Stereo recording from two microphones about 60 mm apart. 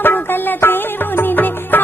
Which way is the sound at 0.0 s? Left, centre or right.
Left.